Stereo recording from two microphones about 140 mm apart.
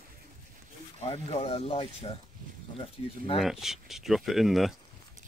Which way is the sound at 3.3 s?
Centre (ahead or behind).